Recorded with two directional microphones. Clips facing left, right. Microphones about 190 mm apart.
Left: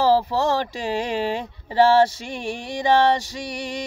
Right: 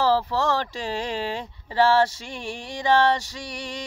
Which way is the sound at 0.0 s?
15° left (ahead or behind).